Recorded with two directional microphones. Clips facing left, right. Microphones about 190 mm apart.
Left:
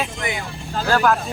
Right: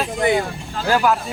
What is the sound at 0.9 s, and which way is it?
Speech, 10° right (ahead or behind).